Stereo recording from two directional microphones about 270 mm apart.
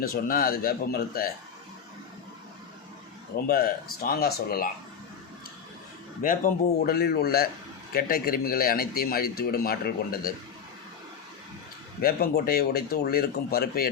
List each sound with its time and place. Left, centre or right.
0.0 s speech: left
3.3 s speech: left
6.2 s speech: left
12.0 s speech: left